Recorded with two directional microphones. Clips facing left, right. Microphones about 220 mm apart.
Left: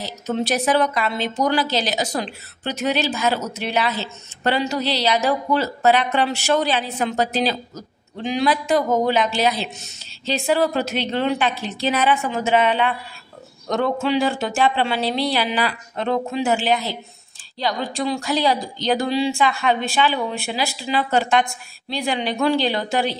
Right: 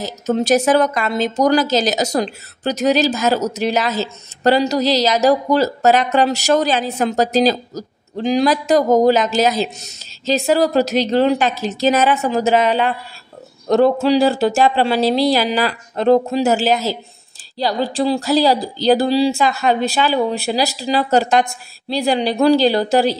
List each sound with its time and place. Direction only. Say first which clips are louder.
0.0 s a woman's voice: right 5 dB; 45° right (ahead or behind)